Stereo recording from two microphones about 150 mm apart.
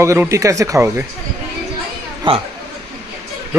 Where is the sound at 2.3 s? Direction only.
35° right (ahead or behind).